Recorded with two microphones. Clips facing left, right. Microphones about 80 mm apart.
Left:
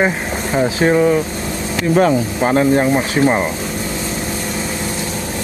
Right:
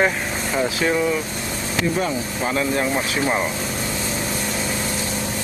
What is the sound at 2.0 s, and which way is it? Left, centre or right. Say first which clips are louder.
Speech: left 9 dB; left.